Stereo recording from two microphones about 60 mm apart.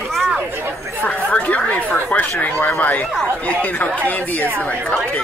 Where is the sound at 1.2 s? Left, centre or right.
Left.